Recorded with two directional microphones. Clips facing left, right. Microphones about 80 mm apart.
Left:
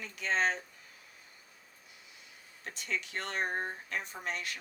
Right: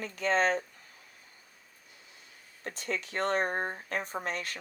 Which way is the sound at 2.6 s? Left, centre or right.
Right.